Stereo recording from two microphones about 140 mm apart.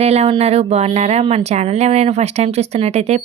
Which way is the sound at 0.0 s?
50° right (ahead or behind).